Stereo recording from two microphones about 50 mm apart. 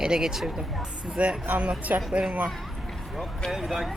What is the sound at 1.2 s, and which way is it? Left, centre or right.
Speech, right.